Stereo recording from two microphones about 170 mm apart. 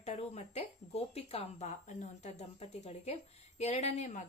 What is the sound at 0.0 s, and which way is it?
A woman's voice, 40° left (ahead or behind).